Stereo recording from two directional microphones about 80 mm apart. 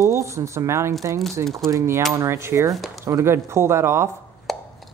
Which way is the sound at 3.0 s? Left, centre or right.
Right.